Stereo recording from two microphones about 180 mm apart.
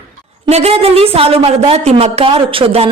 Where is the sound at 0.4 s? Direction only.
35° right (ahead or behind).